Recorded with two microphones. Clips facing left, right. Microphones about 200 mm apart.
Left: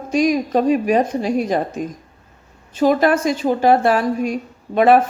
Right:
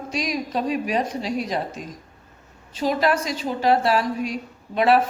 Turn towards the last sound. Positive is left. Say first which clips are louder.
# left 5 dB
turn(degrees=50)  # may be behind; listen again after turning